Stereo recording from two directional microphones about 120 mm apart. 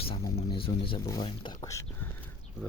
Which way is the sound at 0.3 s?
55° left (ahead or behind).